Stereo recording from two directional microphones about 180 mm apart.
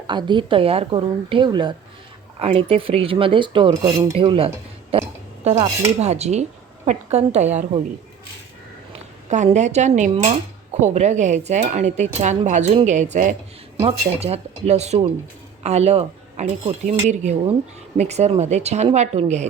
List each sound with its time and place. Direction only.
0.1 s speech: 25° right (ahead or behind)
8.9 s speech: 40° right (ahead or behind)